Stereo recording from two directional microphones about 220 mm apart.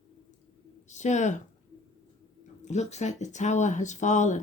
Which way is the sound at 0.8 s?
35° left (ahead or behind).